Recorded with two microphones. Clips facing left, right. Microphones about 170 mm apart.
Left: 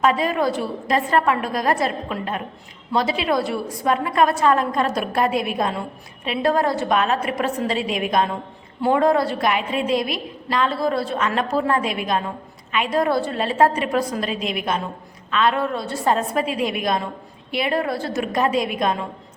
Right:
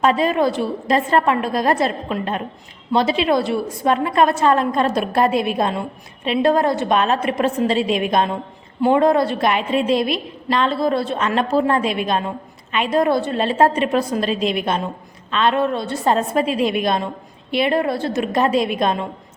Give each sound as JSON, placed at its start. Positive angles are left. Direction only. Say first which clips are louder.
{"t": 0.0, "sound": "a woman's voice", "louder": "right 3 dB", "side_deg": -25}